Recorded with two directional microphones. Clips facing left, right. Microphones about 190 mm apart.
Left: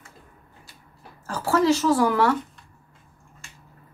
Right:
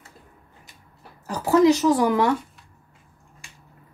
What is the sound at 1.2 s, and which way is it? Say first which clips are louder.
Speech: right 4 dB; 15° right (ahead or behind).